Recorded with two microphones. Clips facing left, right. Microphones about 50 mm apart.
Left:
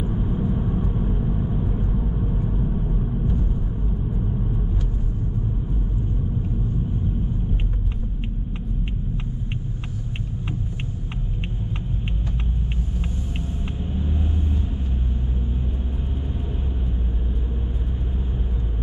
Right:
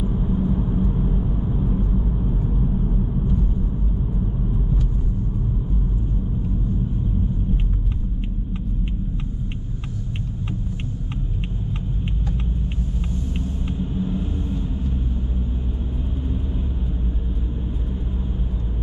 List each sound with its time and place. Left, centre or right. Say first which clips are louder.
0.0 s vehicle: right 2 dB; centre
13.7 s vehicle: right 5 dB; centre